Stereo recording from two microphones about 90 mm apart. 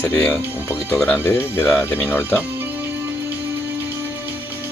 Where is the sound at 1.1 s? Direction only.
25° left (ahead or behind).